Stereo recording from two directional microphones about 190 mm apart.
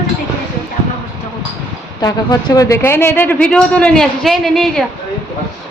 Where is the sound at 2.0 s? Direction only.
20° left (ahead or behind); by 4.8 s centre (ahead or behind).